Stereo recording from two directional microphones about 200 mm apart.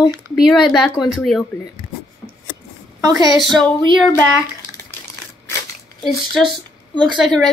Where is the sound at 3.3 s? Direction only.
Centre (ahead or behind).